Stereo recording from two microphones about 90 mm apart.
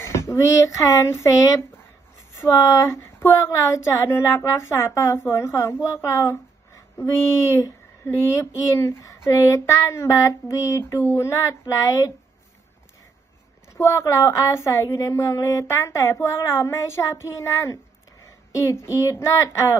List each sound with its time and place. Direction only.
0.0 s speech: 30° left (ahead or behind)
13.7 s speech: 30° left (ahead or behind)